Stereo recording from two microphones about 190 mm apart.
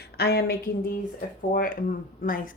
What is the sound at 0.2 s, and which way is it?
Speech, 55° left (ahead or behind).